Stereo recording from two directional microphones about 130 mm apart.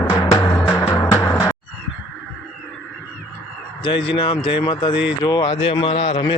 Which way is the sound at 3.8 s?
40° left (ahead or behind).